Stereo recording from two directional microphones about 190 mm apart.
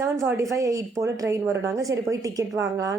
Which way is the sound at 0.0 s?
15° right (ahead or behind).